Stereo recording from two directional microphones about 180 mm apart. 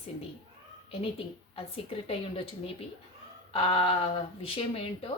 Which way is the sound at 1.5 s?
30° left (ahead or behind).